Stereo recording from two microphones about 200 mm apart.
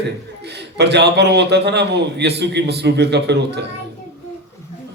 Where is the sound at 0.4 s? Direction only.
55° right (ahead or behind).